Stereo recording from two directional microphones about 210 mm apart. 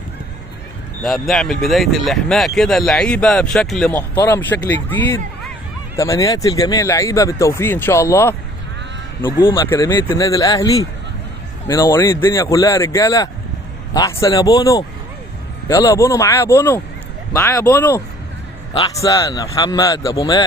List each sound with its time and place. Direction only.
1.0 s speech: centre (ahead or behind); by 20.4 s 15° left (ahead or behind)